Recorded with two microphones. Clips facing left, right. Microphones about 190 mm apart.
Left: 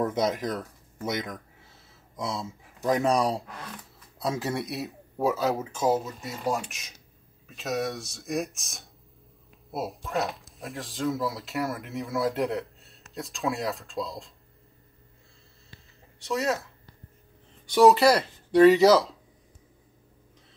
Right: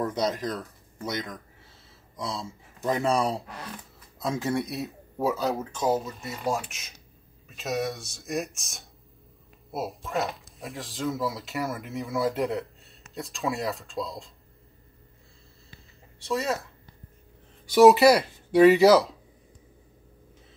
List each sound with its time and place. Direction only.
0.1 s speech: 20° left (ahead or behind)
0.9 s speech: 5° left (ahead or behind)
2.1 s speech: 20° left (ahead or behind)
4.2 s speech: 5° left (ahead or behind)
16.3 s speech: centre (ahead or behind)
17.6 s speech: 5° right (ahead or behind)